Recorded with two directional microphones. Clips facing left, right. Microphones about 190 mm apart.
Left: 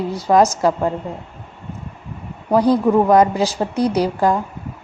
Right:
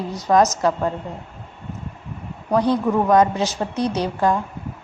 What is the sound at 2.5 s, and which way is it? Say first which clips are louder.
A woman's voice: left 4 dB; 35° left (ahead or behind).